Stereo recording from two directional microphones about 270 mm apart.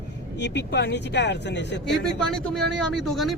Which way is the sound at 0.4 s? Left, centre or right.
Left.